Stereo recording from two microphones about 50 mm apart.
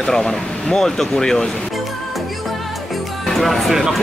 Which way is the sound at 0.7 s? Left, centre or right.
Centre.